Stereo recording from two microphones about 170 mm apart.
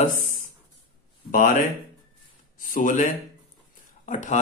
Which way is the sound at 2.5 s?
50° left (ahead or behind).